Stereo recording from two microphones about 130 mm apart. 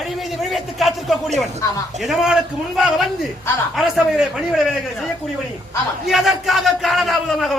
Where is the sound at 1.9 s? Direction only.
Centre (ahead or behind).